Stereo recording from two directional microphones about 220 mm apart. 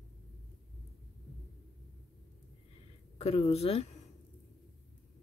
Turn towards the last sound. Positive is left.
turn(degrees=30)  # may be behind; listen again after turning